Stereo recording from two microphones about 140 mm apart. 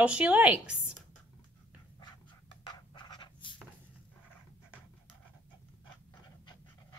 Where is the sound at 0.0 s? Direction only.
10° right (ahead or behind).